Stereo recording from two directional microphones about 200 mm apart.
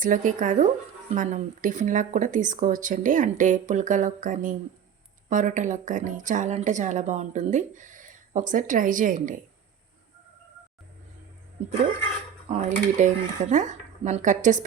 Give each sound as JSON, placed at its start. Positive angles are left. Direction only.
{"t": 0.0, "sound": "speech", "side_deg": -40}
{"t": 12.5, "sound": "speech", "side_deg": -35}